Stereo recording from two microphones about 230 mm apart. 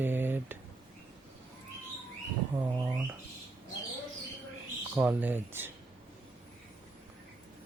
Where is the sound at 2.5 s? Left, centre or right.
Centre.